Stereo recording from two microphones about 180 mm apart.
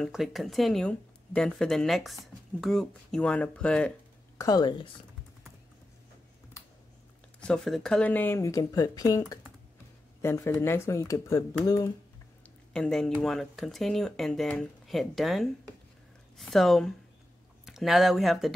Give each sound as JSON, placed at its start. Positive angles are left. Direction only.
{"t": 0.0, "sound": "speech", "side_deg": 0}
{"t": 4.4, "sound": "a woman's voice", "side_deg": 20}
{"t": 7.3, "sound": "speech", "side_deg": 5}
{"t": 12.4, "sound": "speech", "side_deg": 5}